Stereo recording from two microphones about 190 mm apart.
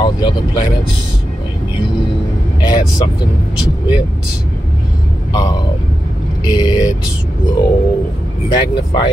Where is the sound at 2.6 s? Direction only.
20° left (ahead or behind).